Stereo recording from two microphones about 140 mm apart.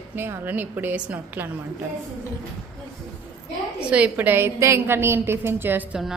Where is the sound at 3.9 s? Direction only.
10° right (ahead or behind).